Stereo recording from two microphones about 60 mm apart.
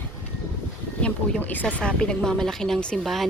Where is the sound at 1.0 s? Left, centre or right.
Centre.